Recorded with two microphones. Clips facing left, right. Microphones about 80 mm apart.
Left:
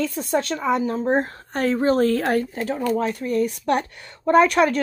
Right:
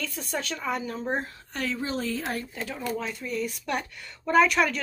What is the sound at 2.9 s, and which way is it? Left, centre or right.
Speech, left.